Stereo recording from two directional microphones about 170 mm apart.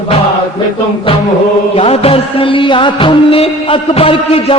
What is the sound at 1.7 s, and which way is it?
Music, 35° left (ahead or behind).